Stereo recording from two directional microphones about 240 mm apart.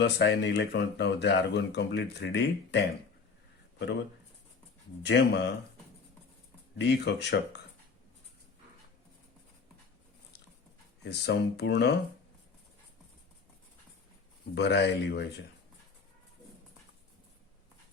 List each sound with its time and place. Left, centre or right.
0.0 s speech: left
5.0 s speech: left
6.7 s speech: left
11.0 s speech: left
14.5 s speech: left